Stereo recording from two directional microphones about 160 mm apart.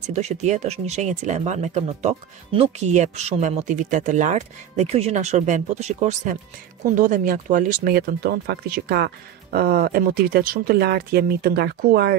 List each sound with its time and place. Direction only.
0.0 s speech: 45° right (ahead or behind)
7.0 s speech: 55° right (ahead or behind); by 12.2 s 75° right (ahead or behind)